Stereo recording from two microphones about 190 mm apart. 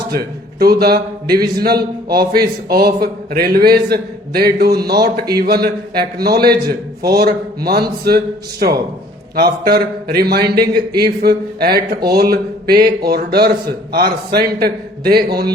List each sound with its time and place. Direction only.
0.1 s a man's voice: 55° right (ahead or behind)